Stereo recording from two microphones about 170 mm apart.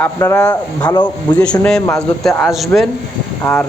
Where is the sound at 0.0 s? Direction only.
15° left (ahead or behind).